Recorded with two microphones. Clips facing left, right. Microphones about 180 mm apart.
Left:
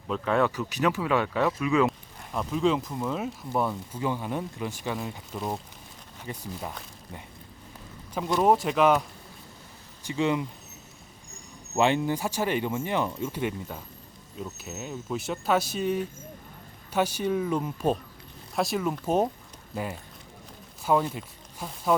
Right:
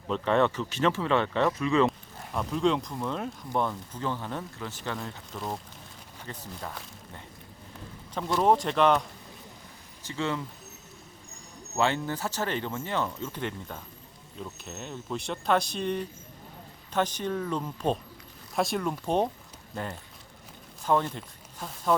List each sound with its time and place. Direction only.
0.1 s speech: 5° left (ahead or behind)
8.1 s speech: 5° left (ahead or behind)
11.8 s speech: 15° left (ahead or behind)